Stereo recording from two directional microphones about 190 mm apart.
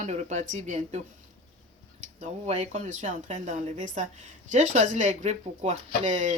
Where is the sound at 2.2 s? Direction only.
35° right (ahead or behind).